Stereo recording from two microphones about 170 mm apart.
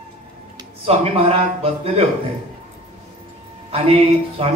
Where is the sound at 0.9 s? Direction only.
35° right (ahead or behind).